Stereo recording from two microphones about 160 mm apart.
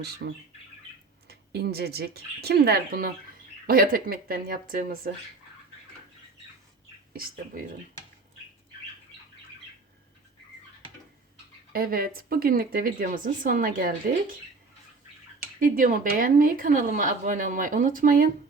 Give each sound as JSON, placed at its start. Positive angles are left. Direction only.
{"t": 0.2, "sound": "bird", "side_deg": -90}
{"t": 1.3, "sound": "a woman's voice", "side_deg": -85}
{"t": 7.1, "sound": "speech", "side_deg": -65}
{"t": 11.7, "sound": "a woman's voice", "side_deg": -65}
{"t": 15.6, "sound": "a woman's voice", "side_deg": -60}